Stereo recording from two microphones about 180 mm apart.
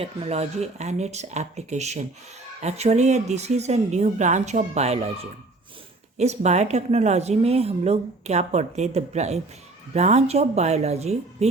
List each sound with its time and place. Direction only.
0.0 s speech: 35° right (ahead or behind)